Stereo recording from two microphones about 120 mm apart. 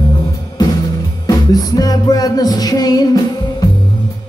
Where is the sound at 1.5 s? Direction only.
30° left (ahead or behind).